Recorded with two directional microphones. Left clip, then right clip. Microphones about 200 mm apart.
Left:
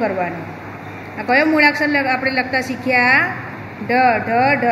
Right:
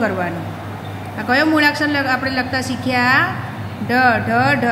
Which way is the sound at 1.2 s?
10° left (ahead or behind).